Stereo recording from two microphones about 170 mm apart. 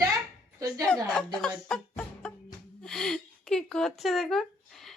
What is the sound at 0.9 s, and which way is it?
Speech, 5° left (ahead or behind).